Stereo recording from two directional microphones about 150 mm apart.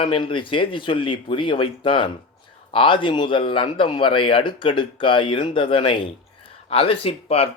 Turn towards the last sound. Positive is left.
turn(degrees=40)  # may be behind; listen again after turning